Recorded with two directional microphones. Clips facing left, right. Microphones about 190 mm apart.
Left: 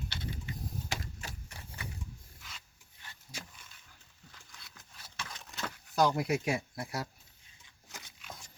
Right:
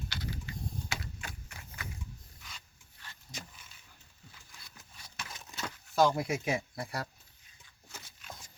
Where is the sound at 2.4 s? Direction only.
Centre (ahead or behind).